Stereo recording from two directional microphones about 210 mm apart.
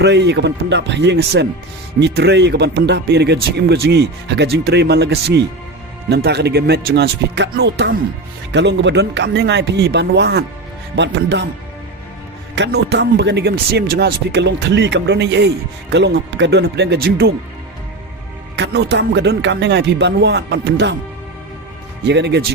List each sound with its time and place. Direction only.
0.0 s speech: 55° right (ahead or behind)
12.5 s speech: 55° right (ahead or behind)
18.5 s speech: 55° right (ahead or behind)
22.0 s speech: 55° right (ahead or behind)